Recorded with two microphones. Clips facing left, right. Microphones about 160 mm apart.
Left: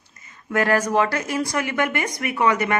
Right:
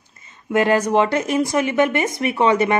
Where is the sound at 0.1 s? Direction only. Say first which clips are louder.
Right 5 dB; 25° right (ahead or behind).